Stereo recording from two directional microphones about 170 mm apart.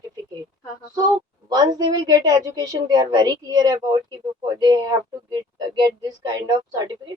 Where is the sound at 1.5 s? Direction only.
25° right (ahead or behind).